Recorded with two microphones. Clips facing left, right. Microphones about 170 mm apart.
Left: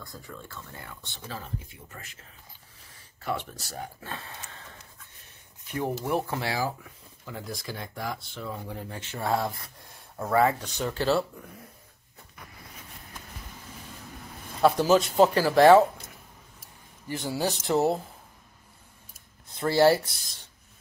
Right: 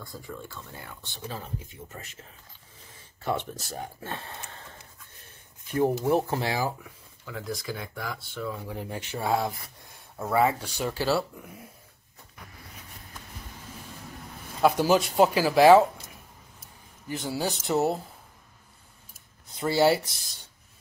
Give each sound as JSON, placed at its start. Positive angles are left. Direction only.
{"t": 0.2, "sound": "speech", "side_deg": -15}
{"t": 1.3, "sound": "speech", "side_deg": -25}
{"t": 3.3, "sound": "speech", "side_deg": -25}
{"t": 4.3, "sound": "a sound", "side_deg": -45}
{"t": 5.7, "sound": "speech", "side_deg": -30}
{"t": 7.2, "sound": "speech", "side_deg": 0}
{"t": 8.8, "sound": "speech", "side_deg": -15}
{"t": 14.6, "sound": "speech", "side_deg": -10}
{"t": 17.1, "sound": "speech", "side_deg": 0}
{"t": 19.6, "sound": "speech", "side_deg": -5}